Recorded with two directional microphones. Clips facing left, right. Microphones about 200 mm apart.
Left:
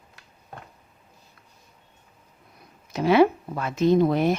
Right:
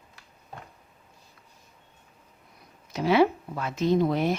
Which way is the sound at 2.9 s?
55° left (ahead or behind).